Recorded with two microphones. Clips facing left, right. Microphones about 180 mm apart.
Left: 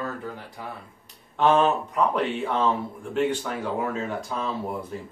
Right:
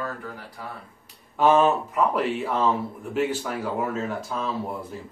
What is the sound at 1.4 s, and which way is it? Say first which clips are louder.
Speech: right 1 dB; 5° right (ahead or behind).